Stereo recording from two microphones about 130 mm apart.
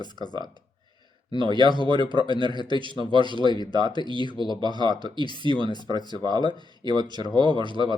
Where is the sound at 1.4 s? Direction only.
35° right (ahead or behind).